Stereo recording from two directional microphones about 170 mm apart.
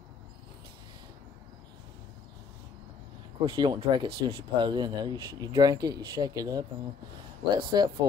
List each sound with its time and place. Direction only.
3.3 s speech: 25° right (ahead or behind)